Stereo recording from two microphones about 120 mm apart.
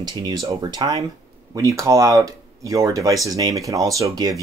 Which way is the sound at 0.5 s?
35° right (ahead or behind).